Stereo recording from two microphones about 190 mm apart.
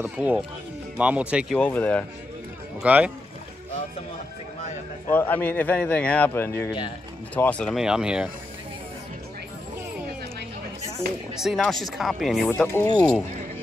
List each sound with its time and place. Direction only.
0.0 s speech: 10° right (ahead or behind)
1.6 s a man's voice: 10° left (ahead or behind)
2.8 s speech: 5° right (ahead or behind)
5.1 s a man's voice: 10° left (ahead or behind)
6.6 s speech: 25° left (ahead or behind)
7.3 s speech: 5° left (ahead or behind)
11.3 s speech: centre (ahead or behind)
12.4 s a man's voice: 10° left (ahead or behind)